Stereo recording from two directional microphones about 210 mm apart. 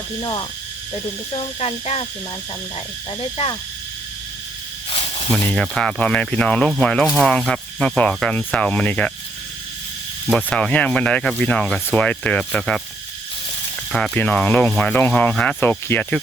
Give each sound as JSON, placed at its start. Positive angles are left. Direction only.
{"t": 0.2, "sound": "speech", "side_deg": 20}
{"t": 5.3, "sound": "speech", "side_deg": 5}
{"t": 10.2, "sound": "speech", "side_deg": 5}
{"t": 13.9, "sound": "speech", "side_deg": 5}